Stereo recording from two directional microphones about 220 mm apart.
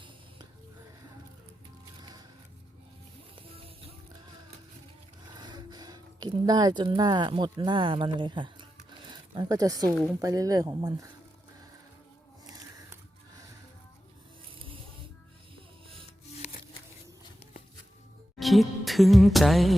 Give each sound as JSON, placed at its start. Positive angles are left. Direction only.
{"t": 3.3, "sound": "music", "side_deg": -25}
{"t": 5.4, "sound": "speech", "side_deg": -20}
{"t": 16.4, "sound": "a sound", "side_deg": 30}
{"t": 18.3, "sound": "music", "side_deg": 0}